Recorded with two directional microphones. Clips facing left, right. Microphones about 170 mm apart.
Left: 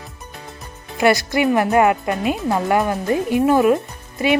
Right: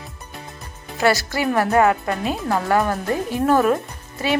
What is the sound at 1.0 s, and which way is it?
Speech, 15° left (ahead or behind).